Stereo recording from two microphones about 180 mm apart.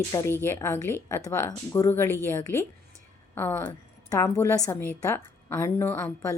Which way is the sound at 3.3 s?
10° left (ahead or behind).